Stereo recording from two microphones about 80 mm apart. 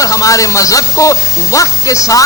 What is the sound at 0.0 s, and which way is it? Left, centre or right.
Speech, left.